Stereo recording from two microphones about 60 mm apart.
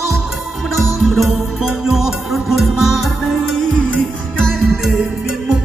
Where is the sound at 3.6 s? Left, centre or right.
Centre.